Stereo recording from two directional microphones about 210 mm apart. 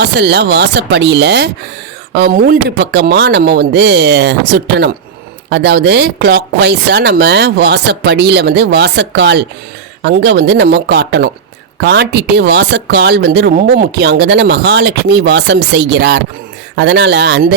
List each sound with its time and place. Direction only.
0.0 s speech: 55° right (ahead or behind)